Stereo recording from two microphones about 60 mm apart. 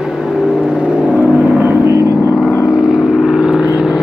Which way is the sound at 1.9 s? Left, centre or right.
Left.